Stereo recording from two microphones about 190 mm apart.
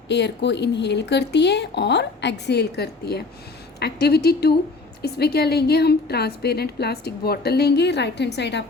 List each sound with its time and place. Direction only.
0.1 s a woman's voice: 65° left (ahead or behind)